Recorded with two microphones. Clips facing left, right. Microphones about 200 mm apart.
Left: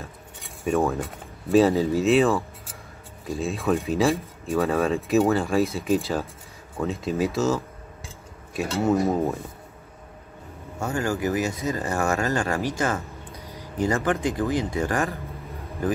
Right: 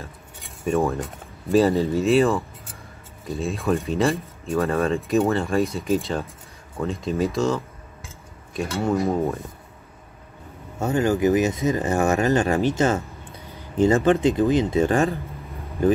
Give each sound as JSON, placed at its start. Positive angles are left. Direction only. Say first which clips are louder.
{"t": 0.0, "sound": "speech", "louder": "even", "side_deg": 0}
{"t": 10.8, "sound": "speech", "louder": "right 6 dB", "side_deg": -20}